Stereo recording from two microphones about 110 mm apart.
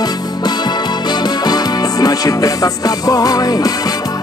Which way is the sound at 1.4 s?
35° left (ahead or behind).